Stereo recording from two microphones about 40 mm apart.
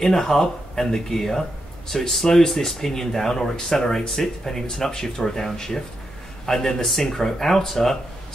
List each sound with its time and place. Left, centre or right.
0.0 s speech: centre